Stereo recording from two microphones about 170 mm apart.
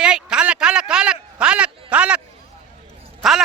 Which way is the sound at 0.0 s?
5° right (ahead or behind).